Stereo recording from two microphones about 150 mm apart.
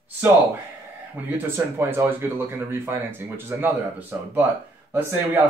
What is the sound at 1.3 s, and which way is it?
Speech, 15° right (ahead or behind).